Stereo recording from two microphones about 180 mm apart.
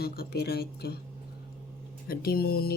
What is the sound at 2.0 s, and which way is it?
Speech, 55° left (ahead or behind).